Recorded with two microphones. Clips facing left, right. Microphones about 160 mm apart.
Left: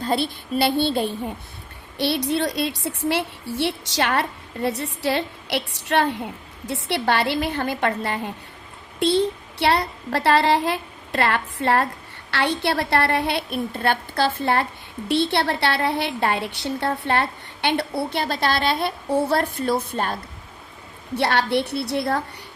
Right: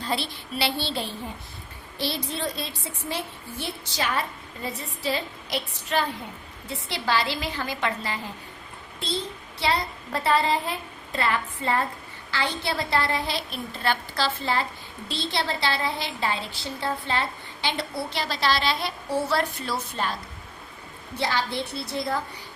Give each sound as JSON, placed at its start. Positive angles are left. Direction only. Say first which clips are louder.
{"t": 0.0, "sound": "a woman's voice", "louder": "left 6 dB", "side_deg": 50}
{"t": 2.0, "sound": "a woman's voice", "louder": "left 8 dB", "side_deg": 65}
{"t": 21.2, "sound": "a woman's voice", "louder": "left 6 dB", "side_deg": 65}